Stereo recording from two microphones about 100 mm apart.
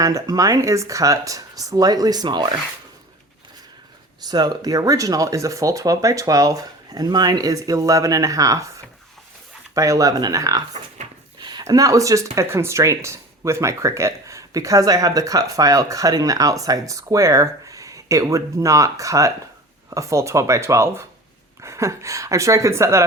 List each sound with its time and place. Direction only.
0.0 s speech: 35° right (ahead or behind)
4.2 s speech: 45° right (ahead or behind)
9.7 s speech: 30° right (ahead or behind)
11.3 s a sound: 45° right (ahead or behind)
11.6 s speech: 35° right (ahead or behind)